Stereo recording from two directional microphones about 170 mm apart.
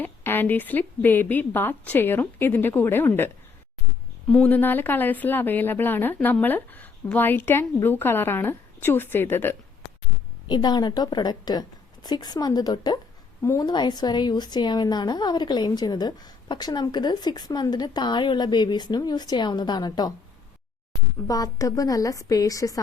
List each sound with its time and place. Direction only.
0.0 s a woman's voice: 10° left (ahead or behind)
10.5 s a woman's voice: 25° left (ahead or behind)
21.2 s a woman's voice: 20° left (ahead or behind)